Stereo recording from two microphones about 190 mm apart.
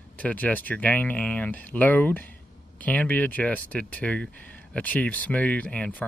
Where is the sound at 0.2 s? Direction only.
10° left (ahead or behind).